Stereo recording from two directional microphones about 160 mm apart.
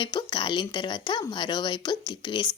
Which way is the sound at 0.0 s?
30° left (ahead or behind).